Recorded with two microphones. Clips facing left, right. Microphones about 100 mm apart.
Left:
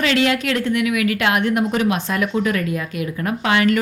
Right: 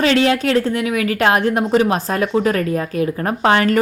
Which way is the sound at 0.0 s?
30° right (ahead or behind).